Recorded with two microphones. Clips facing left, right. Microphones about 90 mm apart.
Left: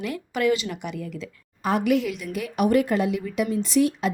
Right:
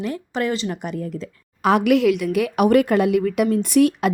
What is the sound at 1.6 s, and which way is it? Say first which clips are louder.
Speech: right 6 dB; 70° right (ahead or behind).